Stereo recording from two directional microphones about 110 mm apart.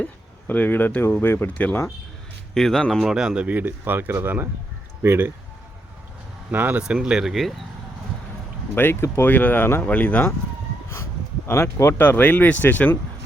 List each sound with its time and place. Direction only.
0.0 s speech: 15° left (ahead or behind)
2.6 s speech: 5° left (ahead or behind)
3.1 s speech: 5° right (ahead or behind)
6.5 s speech: 15° right (ahead or behind)
8.7 s speech: 20° left (ahead or behind)
11.4 s speech: 25° left (ahead or behind)